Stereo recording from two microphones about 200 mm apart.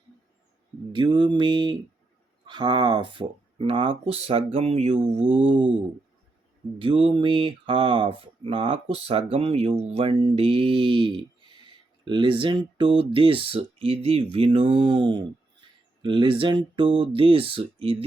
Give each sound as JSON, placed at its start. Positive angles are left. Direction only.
{"t": 0.9, "sound": "speech", "side_deg": -25}
{"t": 6.7, "sound": "speech", "side_deg": -25}